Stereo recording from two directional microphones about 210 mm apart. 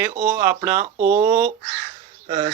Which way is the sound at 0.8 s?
35° right (ahead or behind).